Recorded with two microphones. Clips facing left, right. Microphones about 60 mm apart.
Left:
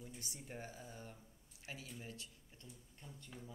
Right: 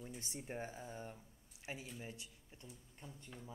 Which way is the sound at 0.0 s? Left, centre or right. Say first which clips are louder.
Right 4 dB; right.